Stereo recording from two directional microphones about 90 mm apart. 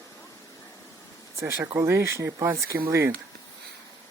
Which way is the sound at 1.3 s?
35° right (ahead or behind).